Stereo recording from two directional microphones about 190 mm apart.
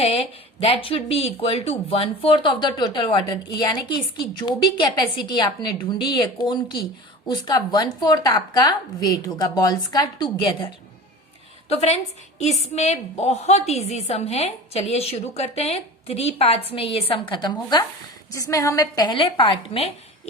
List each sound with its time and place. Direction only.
0.0 s speech: 30° left (ahead or behind)
11.7 s a woman's voice: 35° left (ahead or behind)